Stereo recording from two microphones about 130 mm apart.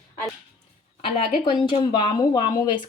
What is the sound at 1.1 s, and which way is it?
Speech, 35° left (ahead or behind).